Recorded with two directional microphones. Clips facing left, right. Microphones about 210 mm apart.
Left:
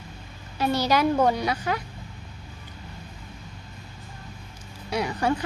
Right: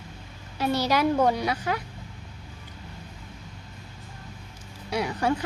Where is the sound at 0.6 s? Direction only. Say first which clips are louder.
Left 1 dB; centre (ahead or behind).